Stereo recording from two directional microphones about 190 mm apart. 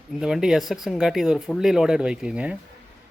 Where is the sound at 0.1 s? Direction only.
Centre (ahead or behind).